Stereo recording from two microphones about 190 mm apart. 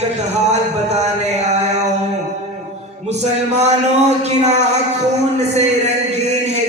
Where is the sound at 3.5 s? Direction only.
35° right (ahead or behind).